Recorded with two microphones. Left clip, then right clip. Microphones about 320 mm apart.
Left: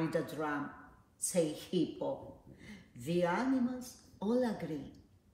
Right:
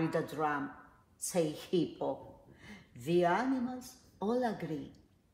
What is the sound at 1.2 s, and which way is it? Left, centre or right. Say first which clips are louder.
A woman's voice: even; right.